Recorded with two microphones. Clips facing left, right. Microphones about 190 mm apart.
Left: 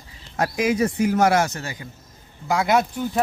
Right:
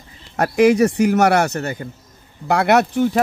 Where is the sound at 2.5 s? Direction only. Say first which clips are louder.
Right 5 dB; 65° right (ahead or behind).